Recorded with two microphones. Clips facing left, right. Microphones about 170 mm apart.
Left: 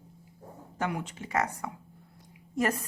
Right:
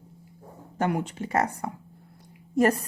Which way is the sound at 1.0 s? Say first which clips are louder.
Right 4 dB; 35° right (ahead or behind).